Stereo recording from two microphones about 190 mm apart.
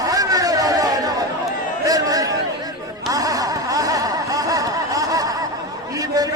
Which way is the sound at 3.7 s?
20° right (ahead or behind).